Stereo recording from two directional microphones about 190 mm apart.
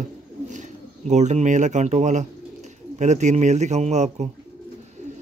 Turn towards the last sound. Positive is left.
turn(degrees=-35)  # may be behind; listen again after turning